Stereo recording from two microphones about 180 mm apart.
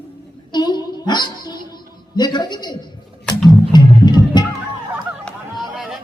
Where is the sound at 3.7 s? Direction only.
25° left (ahead or behind).